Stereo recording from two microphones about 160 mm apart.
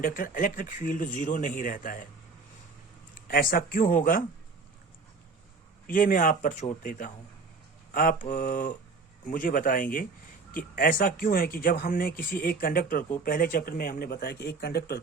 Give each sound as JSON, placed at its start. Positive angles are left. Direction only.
{"t": 0.0, "sound": "speech", "side_deg": 60}
{"t": 3.2, "sound": "speech", "side_deg": 65}
{"t": 5.9, "sound": "speech", "side_deg": 60}
{"t": 7.9, "sound": "speech", "side_deg": 60}